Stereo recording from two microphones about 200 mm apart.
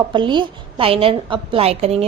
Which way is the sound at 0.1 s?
25° right (ahead or behind).